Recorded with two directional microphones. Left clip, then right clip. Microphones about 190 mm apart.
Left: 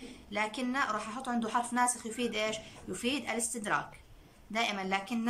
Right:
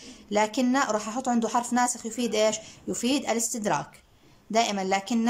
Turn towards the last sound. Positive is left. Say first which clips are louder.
# right 7 dB
turn(degrees=-30)  # may be behind; listen again after turning